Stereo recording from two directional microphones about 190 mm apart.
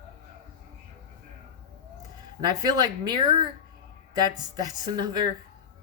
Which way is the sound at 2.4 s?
20° right (ahead or behind).